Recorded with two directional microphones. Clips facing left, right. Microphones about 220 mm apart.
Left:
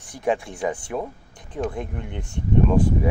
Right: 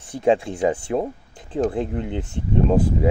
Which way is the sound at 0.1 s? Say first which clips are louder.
Right 5 dB; 25° right (ahead or behind).